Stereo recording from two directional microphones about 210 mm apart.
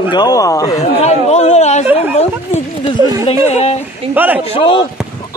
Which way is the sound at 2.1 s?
30° left (ahead or behind).